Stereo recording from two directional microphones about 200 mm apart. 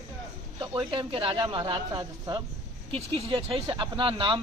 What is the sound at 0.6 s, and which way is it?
Speech, 25° right (ahead or behind).